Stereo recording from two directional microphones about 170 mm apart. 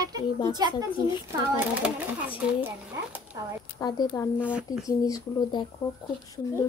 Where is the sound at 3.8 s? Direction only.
25° left (ahead or behind).